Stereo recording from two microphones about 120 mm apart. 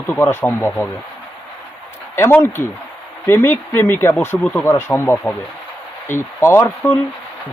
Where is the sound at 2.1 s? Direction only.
20° left (ahead or behind).